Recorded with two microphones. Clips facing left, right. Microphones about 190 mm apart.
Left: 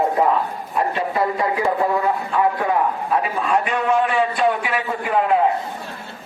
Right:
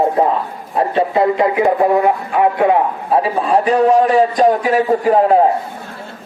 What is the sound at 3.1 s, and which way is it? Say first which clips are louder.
A man's voice: right 7 dB; 30° right (ahead or behind).